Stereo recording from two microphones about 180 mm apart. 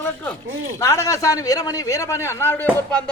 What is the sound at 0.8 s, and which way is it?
A man's voice, 15° left (ahead or behind).